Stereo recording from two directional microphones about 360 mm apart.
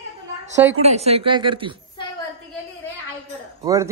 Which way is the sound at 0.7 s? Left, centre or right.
Centre.